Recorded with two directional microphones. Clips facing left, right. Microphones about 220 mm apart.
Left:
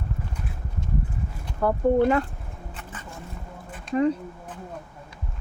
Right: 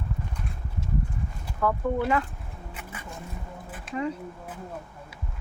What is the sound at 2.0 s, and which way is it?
Speech, 45° left (ahead or behind).